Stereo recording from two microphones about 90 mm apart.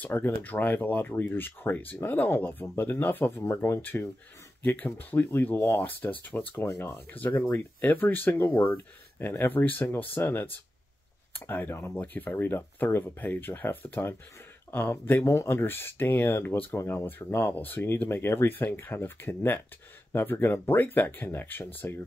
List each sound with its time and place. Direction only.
0.0 s speech: 20° left (ahead or behind)